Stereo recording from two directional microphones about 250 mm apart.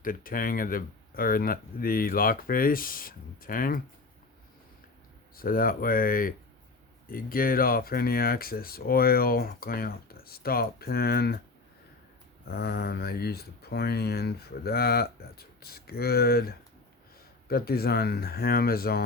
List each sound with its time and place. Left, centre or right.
0.0 s speech: left
5.4 s speech: left
12.5 s speech: left